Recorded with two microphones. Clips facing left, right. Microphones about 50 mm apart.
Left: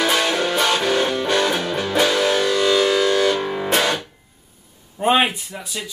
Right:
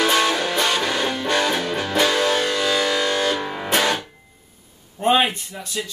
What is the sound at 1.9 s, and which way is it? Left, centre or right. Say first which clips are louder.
Music: left 1 dB; centre.